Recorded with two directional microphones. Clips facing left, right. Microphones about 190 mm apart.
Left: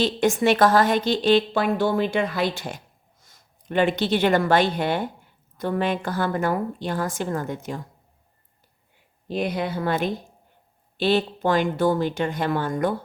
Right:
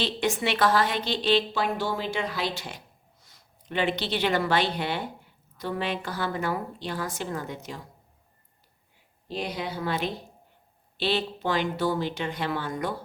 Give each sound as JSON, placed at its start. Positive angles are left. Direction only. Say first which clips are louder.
{"t": 0.0, "sound": "a woman's voice", "louder": "left 7 dB", "side_deg": 45}
{"t": 9.2, "sound": "a woman's voice", "louder": "left 6 dB", "side_deg": 55}